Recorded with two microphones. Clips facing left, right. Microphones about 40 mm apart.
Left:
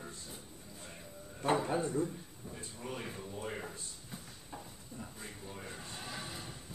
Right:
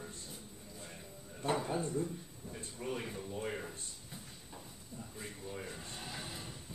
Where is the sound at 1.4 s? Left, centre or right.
Left.